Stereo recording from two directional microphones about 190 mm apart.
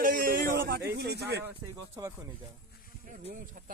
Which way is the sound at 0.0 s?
50° right (ahead or behind).